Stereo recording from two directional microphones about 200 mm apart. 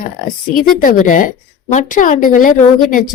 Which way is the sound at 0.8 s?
40° left (ahead or behind).